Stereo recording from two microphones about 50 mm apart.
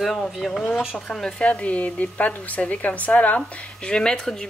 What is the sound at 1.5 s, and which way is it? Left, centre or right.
Speech, left.